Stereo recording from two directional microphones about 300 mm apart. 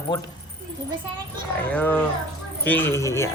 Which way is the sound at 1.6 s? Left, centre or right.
Centre.